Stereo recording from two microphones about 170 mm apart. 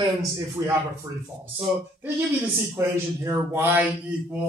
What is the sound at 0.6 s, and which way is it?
Speech, 20° right (ahead or behind).